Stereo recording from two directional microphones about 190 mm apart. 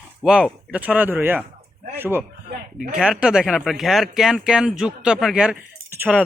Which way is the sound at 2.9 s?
5° right (ahead or behind).